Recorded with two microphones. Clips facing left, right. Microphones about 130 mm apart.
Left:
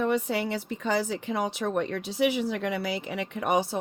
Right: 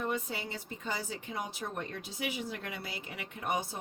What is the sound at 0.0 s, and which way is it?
Speech, 80° left.